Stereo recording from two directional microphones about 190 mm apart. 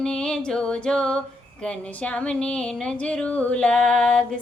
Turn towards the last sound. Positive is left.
turn(degrees=5)  # may be behind; listen again after turning